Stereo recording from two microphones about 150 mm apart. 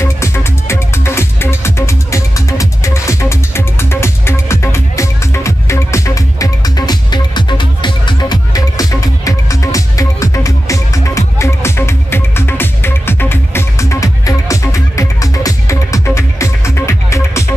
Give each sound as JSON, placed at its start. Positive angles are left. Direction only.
{"t": 0.0, "sound": "music", "side_deg": 20}